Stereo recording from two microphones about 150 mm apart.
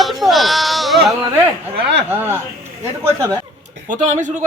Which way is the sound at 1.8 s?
90° right.